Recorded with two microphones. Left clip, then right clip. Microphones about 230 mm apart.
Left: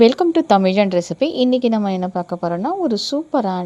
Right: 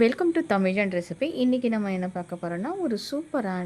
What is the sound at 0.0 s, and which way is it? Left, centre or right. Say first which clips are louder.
A woman's voice: left 9 dB; left.